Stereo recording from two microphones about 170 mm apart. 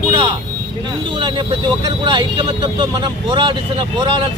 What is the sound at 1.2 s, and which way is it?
Speech, 25° right (ahead or behind).